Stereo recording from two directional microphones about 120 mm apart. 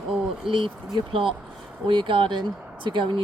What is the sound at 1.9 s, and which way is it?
Speech, 40° right (ahead or behind).